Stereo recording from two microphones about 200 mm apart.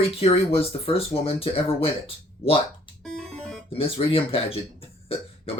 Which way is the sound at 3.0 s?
5° left (ahead or behind).